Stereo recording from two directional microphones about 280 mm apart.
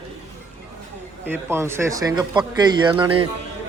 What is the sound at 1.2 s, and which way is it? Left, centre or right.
A man's voice, centre.